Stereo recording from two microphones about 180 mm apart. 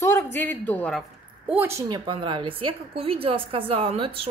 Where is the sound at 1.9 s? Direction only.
25° right (ahead or behind).